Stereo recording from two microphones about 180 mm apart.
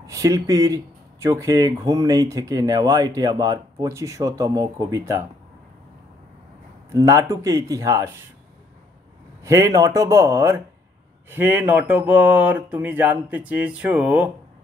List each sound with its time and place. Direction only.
0.0 s speech: 20° right (ahead or behind)
6.9 s speech: 15° right (ahead or behind)
9.4 s speech: 15° right (ahead or behind)